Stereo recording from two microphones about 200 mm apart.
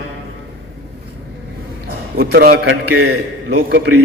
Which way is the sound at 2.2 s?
50° right (ahead or behind).